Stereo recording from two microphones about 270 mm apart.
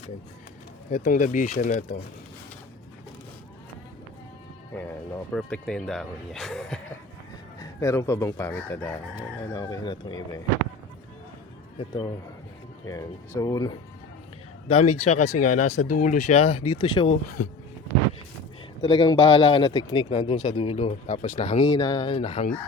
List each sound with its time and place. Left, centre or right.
0.9 s speech: left
4.7 s speech: centre
11.8 s speech: centre
15.0 s speech: left
18.8 s speech: centre